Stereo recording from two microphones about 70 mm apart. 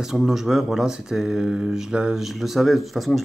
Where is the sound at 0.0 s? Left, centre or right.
Centre.